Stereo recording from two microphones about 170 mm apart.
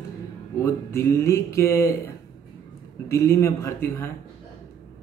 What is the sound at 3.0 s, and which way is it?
A man's voice, 15° left (ahead or behind).